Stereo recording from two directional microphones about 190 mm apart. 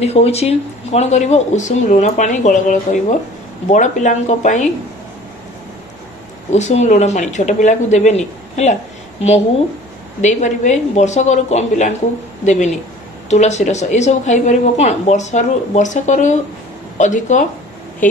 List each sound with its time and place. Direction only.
0.0 s speech: 35° left (ahead or behind)
6.5 s speech: 35° left (ahead or behind)
10.2 s speech: 40° left (ahead or behind)